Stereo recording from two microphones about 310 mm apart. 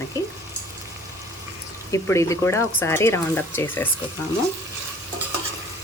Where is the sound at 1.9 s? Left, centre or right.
Centre.